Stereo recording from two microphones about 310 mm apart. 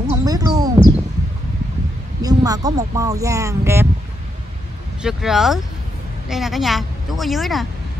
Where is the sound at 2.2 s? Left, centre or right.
Centre.